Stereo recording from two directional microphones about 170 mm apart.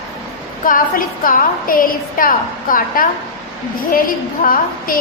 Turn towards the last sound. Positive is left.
turn(degrees=55)  # may be behind; listen again after turning